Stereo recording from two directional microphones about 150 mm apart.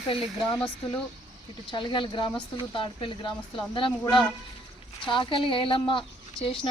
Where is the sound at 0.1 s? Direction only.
40° left (ahead or behind).